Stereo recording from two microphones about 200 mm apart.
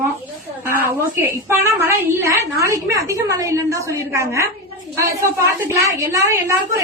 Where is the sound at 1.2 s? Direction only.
15° right (ahead or behind).